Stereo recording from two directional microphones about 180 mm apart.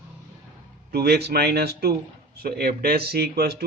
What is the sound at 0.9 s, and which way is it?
Speech, 65° right (ahead or behind).